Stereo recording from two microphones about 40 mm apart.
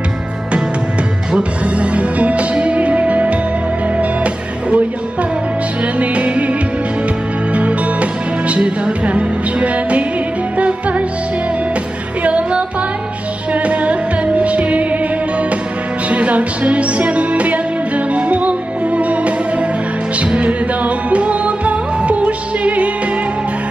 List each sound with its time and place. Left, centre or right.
1.8 s music: right
5.9 s music: right
7.5 s music: right
12.2 s music: right
16.1 s music: right